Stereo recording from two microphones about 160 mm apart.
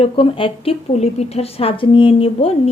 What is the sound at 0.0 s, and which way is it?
A woman's voice, 35° left (ahead or behind).